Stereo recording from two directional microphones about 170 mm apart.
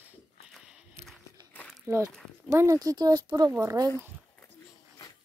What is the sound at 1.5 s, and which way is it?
Crumpling, 10° left (ahead or behind).